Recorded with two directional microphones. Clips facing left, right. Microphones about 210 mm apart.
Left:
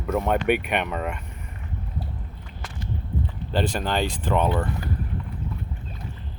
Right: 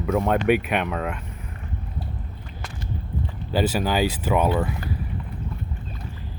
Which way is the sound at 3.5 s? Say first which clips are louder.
Right 3 dB; 5° right (ahead or behind).